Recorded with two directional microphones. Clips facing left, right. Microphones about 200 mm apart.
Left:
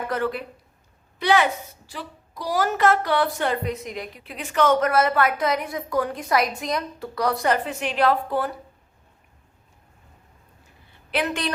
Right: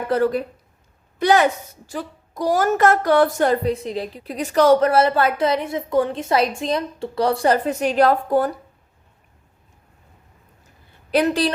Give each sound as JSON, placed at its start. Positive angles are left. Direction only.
{"t": 0.1, "sound": "a woman's voice", "side_deg": -40}
{"t": 11.1, "sound": "a woman's voice", "side_deg": -35}